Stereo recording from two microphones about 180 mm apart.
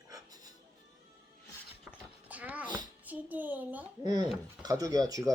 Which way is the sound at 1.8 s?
10° right (ahead or behind).